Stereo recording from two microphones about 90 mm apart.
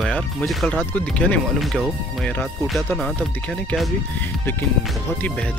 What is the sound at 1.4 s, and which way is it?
Speech, centre (ahead or behind).